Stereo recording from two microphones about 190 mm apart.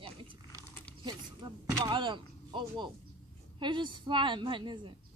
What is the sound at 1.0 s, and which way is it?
A woman's voice, 25° right (ahead or behind).